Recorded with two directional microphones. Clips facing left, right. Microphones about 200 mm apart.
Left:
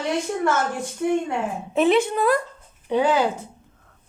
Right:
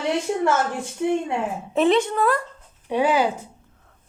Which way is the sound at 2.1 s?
15° left (ahead or behind).